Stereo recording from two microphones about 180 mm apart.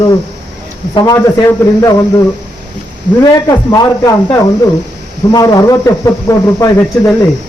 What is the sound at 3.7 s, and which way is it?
A man's voice, 20° left (ahead or behind).